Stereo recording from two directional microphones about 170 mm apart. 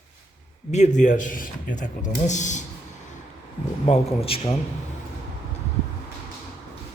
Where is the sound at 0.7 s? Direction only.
45° left (ahead or behind).